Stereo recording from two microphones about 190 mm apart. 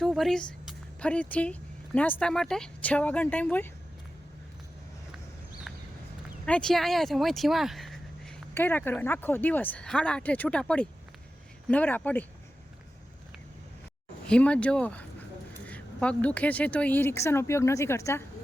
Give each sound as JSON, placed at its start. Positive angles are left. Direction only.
{"t": 0.0, "sound": "speech", "side_deg": 0}
{"t": 6.4, "sound": "speech", "side_deg": 5}
{"t": 8.5, "sound": "speech", "side_deg": 10}
{"t": 14.3, "sound": "speech", "side_deg": 5}